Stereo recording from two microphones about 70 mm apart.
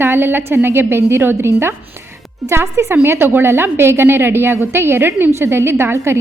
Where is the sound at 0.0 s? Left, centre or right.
Right.